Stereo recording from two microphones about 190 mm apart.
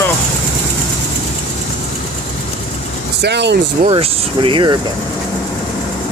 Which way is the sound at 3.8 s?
25° right (ahead or behind).